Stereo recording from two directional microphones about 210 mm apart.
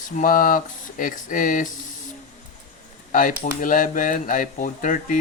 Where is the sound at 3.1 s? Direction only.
40° left (ahead or behind).